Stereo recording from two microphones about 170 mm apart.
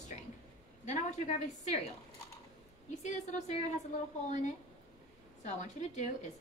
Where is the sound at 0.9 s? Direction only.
45° left (ahead or behind).